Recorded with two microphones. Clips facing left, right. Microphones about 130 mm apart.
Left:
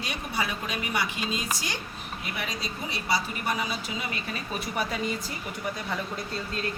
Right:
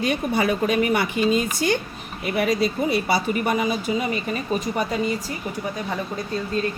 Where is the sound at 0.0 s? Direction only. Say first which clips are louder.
Right 10 dB; 55° right (ahead or behind).